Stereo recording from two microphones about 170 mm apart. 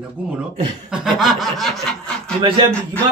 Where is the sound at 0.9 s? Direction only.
Centre (ahead or behind).